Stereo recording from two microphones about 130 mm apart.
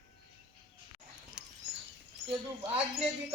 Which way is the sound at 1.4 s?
5° right (ahead or behind).